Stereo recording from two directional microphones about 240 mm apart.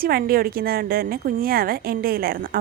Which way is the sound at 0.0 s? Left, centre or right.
Right.